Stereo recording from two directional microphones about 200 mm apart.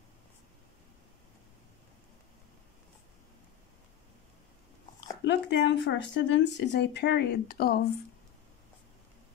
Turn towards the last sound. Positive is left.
turn(degrees=50)  # may be behind; listen again after turning